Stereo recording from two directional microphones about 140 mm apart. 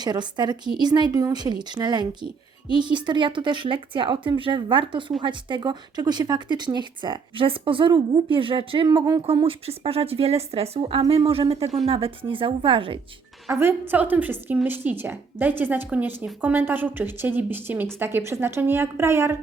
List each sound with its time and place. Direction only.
0.0 s speech: 30° right (ahead or behind)
9.2 s speech: 40° right (ahead or behind)
13.5 s a woman's voice: 15° right (ahead or behind)